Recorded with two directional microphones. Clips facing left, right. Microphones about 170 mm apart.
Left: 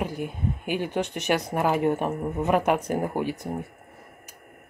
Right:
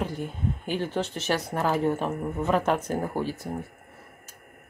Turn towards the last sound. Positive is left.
turn(degrees=15)  # may be behind; listen again after turning